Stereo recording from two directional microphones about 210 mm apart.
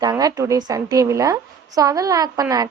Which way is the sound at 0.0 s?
20° right (ahead or behind).